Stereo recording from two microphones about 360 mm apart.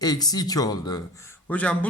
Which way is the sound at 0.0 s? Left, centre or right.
Centre.